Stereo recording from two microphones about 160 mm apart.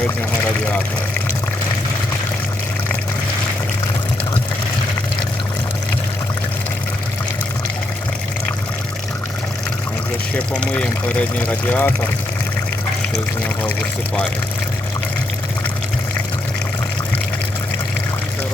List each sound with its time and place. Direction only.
10.3 s speech: 10° left (ahead or behind)